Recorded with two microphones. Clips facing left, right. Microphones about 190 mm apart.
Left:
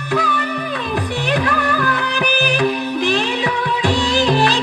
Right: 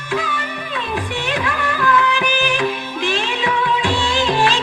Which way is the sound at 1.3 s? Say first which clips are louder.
Left 5 dB; 40° left (ahead or behind).